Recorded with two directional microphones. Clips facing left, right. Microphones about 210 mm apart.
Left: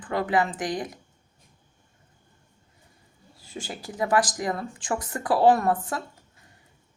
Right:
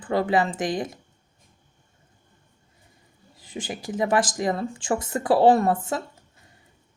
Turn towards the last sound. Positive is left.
turn(degrees=-25)  # may be behind; listen again after turning